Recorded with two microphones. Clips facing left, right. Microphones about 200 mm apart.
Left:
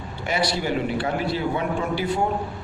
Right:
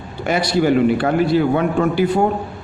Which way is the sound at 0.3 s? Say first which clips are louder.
Right 8 dB; 55° right (ahead or behind).